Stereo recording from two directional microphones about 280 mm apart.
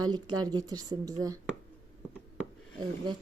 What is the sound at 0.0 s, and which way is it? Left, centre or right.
A woman's voice, centre.